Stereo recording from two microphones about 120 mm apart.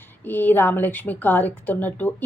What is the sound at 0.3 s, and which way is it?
A woman's voice, 15° left (ahead or behind).